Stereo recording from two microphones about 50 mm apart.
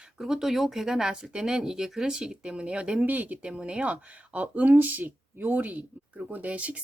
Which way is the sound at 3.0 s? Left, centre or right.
Right.